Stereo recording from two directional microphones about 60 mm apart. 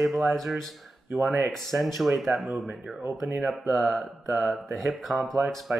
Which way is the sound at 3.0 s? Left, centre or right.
Right.